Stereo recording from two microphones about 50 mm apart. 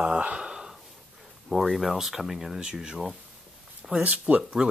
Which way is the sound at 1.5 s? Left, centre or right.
Centre.